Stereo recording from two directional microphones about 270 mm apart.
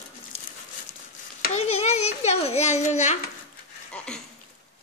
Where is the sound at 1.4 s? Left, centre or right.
Left.